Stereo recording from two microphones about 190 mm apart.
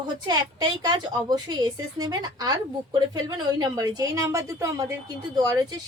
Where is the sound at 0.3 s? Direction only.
20° right (ahead or behind).